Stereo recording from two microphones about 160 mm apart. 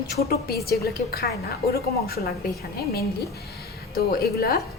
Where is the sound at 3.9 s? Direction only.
70° left (ahead or behind).